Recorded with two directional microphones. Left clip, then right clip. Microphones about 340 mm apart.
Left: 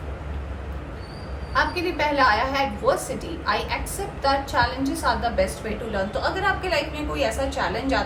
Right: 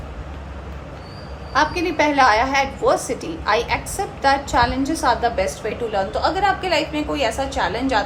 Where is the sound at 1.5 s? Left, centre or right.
Centre.